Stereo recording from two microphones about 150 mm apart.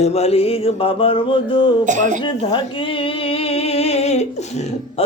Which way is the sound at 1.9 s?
55° right (ahead or behind).